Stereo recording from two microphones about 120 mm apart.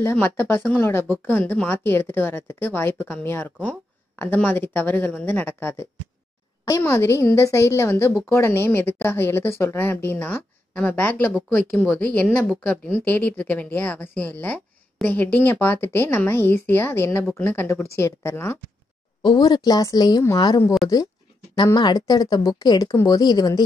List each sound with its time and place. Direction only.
0.0 s a woman's voice: 15° left (ahead or behind)
19.2 s a woman's voice: 35° left (ahead or behind)
21.7 s a woman's voice: 35° left (ahead or behind)